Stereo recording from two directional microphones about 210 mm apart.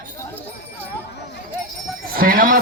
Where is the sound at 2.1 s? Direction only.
45° right (ahead or behind).